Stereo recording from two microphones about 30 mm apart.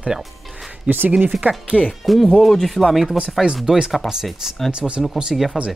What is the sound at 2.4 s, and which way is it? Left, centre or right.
Speech, centre.